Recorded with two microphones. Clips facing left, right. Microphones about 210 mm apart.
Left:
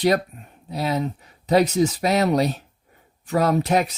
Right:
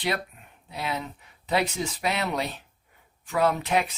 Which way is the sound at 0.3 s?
40° left (ahead or behind).